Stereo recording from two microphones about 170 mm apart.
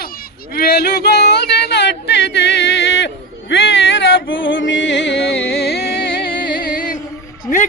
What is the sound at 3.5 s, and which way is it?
Music, 90° left.